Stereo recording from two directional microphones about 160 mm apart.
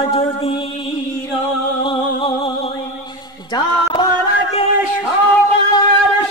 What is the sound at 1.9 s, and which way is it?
Music, 30° left (ahead or behind).